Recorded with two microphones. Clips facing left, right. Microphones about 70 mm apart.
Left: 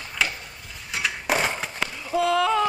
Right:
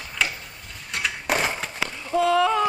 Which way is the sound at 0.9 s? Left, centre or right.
Centre.